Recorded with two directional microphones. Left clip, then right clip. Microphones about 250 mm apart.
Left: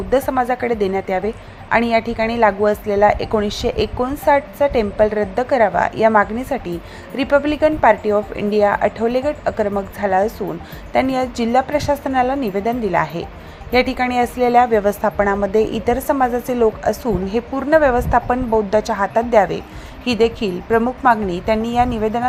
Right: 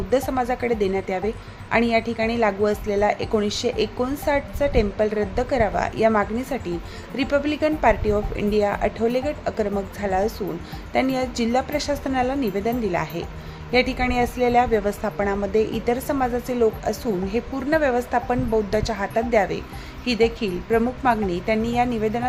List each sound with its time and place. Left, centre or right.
0.1 s a woman's voice: centre